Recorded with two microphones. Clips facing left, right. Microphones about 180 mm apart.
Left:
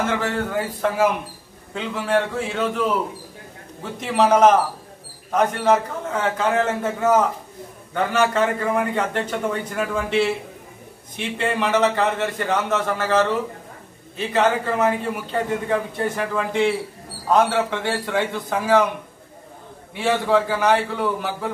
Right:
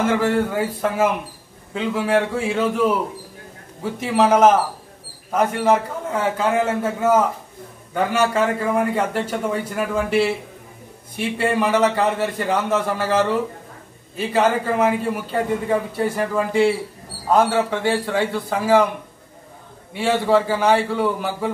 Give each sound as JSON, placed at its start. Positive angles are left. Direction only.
{"t": 0.1, "sound": "a man's voice", "side_deg": -10}
{"t": 4.0, "sound": "a man's voice", "side_deg": -5}
{"t": 20.0, "sound": "a man's voice", "side_deg": -10}